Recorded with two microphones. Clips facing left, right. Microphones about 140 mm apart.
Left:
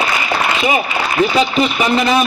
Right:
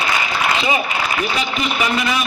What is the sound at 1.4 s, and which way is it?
Speech, 35° left (ahead or behind).